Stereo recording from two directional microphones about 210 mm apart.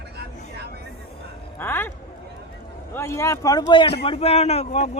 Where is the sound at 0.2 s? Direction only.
50° right (ahead or behind).